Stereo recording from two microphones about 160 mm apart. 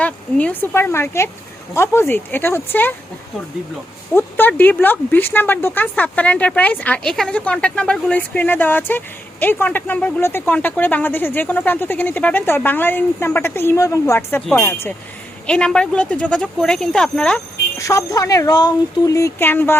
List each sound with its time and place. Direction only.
0.0 s speech: 10° left (ahead or behind)
4.1 s speech: 10° left (ahead or behind)
17.7 s speech: 20° left (ahead or behind)